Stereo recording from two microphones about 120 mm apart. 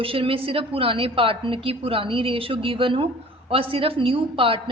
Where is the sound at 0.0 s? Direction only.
50° right (ahead or behind).